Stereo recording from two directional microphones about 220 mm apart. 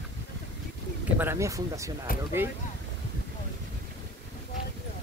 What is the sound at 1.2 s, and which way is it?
Speech, 10° right (ahead or behind).